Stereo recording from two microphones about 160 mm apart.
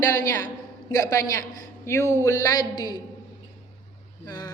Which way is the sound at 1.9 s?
20° left (ahead or behind).